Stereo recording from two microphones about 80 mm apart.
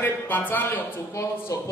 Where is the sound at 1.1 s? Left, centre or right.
Left.